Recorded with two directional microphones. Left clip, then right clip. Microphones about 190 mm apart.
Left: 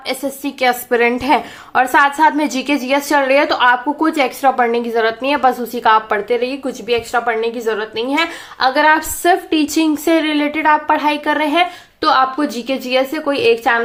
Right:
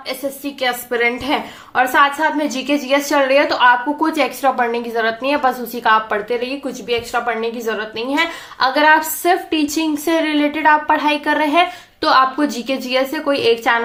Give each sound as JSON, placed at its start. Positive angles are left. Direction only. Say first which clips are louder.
{"t": 0.1, "sound": "a woman's voice", "louder": "left 2 dB", "side_deg": 40}